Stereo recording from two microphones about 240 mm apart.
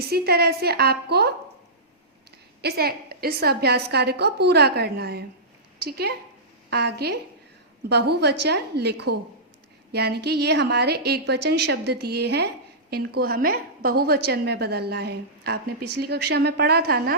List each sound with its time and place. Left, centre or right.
0.1 s a woman's voice: right
2.6 s a woman's voice: right